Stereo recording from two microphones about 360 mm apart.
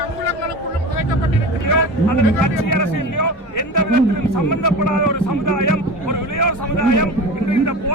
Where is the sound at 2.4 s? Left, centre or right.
Left.